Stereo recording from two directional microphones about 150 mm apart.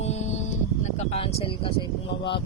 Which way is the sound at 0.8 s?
45° left (ahead or behind).